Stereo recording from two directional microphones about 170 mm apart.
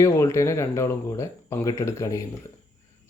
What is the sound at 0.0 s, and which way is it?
Speech, 15° left (ahead or behind).